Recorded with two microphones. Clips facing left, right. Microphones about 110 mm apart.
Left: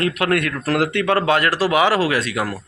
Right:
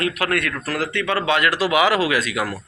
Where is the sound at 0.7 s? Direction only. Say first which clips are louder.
Left 8 dB; 60° left (ahead or behind); by 2.5 s 30° left (ahead or behind).